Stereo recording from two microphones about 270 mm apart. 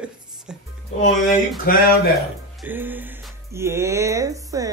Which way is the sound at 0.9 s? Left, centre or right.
Left.